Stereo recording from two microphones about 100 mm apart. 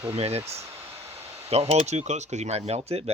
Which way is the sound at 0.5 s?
25° right (ahead or behind).